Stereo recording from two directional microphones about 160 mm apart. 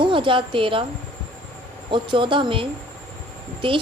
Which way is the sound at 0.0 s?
30° right (ahead or behind).